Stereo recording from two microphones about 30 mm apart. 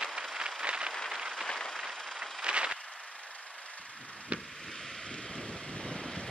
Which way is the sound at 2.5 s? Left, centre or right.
Right.